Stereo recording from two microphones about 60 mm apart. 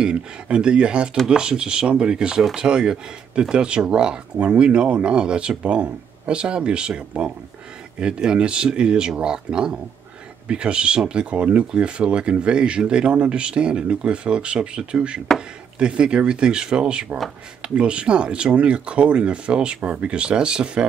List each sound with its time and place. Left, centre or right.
0.0 s speech: centre